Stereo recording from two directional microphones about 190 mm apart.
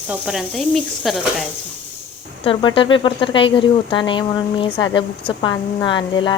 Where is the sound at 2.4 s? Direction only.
25° left (ahead or behind).